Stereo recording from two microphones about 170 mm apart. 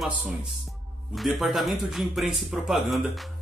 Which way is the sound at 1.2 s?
Centre (ahead or behind).